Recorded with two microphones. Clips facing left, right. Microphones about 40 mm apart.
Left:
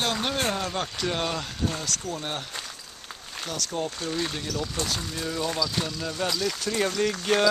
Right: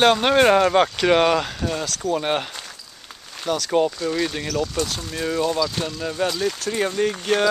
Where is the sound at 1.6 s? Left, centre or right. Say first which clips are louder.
Right 5 dB; right.